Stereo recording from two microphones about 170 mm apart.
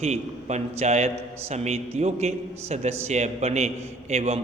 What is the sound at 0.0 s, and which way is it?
A man's voice, 40° right (ahead or behind).